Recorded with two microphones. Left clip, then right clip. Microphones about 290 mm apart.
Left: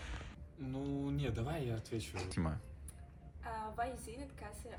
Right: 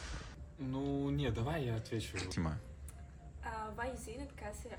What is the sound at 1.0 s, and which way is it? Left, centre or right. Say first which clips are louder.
A woman's voice: right 3 dB; centre.